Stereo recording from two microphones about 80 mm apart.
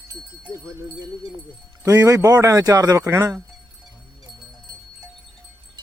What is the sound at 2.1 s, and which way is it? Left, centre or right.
Speech, right.